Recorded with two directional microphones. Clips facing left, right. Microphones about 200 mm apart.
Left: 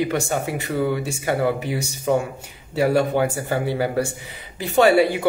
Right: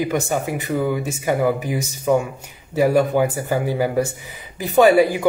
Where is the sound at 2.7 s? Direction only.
15° right (ahead or behind).